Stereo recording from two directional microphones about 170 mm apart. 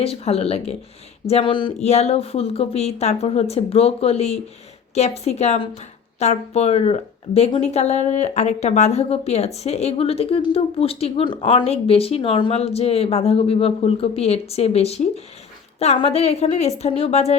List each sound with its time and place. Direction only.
0.0 s speech: 35° left (ahead or behind)
1.3 s a sound: 30° left (ahead or behind)
1.8 s speech: 40° left (ahead or behind)